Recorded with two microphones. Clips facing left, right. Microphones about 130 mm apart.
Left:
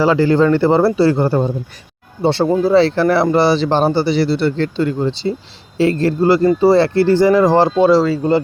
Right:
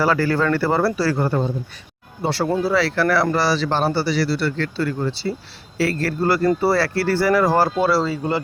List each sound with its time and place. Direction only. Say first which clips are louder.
0.0 s speech: left 6 dB; 20° left (ahead or behind)